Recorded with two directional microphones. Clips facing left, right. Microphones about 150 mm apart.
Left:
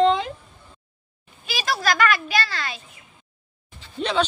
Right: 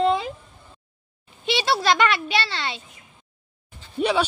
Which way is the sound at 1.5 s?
25° right (ahead or behind).